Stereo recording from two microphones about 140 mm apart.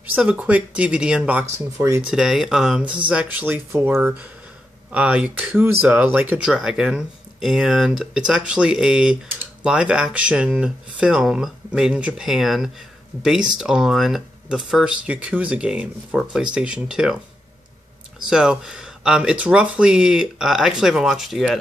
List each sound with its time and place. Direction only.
0.0 s speech: 10° right (ahead or behind)
1.8 s speech: 20° right (ahead or behind)
2.0 s speech: 5° right (ahead or behind)
18.3 s speech: 5° right (ahead or behind)